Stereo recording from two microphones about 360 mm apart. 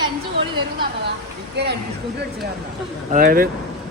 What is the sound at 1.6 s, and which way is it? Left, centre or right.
Speech, right.